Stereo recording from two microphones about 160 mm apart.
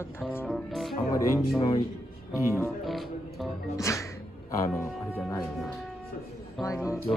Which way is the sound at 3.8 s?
20° left (ahead or behind).